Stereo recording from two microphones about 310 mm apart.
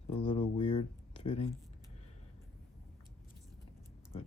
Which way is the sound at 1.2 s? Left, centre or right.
Centre.